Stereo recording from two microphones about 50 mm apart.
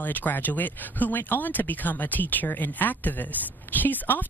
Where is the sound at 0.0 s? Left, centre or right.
Left.